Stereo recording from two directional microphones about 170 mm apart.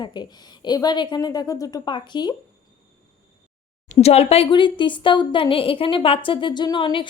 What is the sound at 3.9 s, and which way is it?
A woman's voice, 40° left (ahead or behind).